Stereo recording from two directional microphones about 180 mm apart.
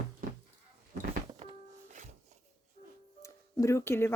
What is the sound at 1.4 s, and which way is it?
Music, 40° right (ahead or behind).